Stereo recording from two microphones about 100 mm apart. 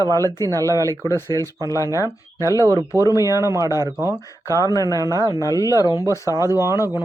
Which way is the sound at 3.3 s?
30° right (ahead or behind).